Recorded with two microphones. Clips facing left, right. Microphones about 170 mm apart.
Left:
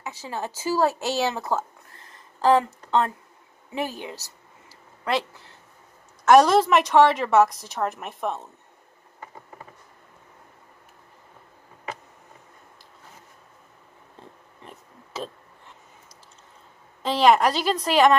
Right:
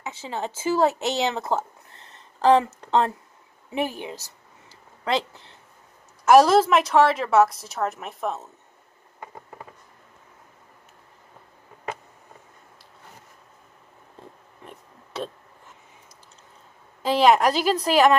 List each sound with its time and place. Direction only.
0.0 s speech: 20° right (ahead or behind)
3.7 s a woman's voice: 15° right (ahead or behind)
6.2 s a woman's voice: 5° right (ahead or behind)
14.6 s a sound: centre (ahead or behind)
17.0 s a woman's voice: 10° right (ahead or behind)